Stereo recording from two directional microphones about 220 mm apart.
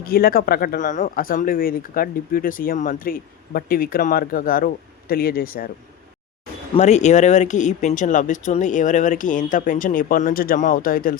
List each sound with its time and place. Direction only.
0.0 s speech: 45° left (ahead or behind)
6.7 s speech: 30° left (ahead or behind)